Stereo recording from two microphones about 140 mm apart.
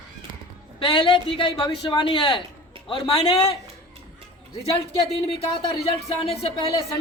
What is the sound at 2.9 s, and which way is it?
Speech, 45° left (ahead or behind).